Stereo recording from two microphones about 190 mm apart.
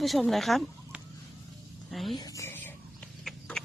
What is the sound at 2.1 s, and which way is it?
Whispering, 20° left (ahead or behind).